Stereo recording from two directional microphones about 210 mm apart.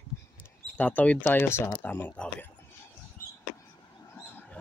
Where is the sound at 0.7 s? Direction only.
5° left (ahead or behind).